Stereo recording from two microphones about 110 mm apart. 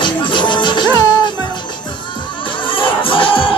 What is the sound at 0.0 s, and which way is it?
Music, 45° left (ahead or behind).